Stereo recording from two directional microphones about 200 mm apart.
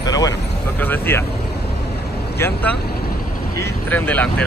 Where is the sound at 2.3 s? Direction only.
10° left (ahead or behind).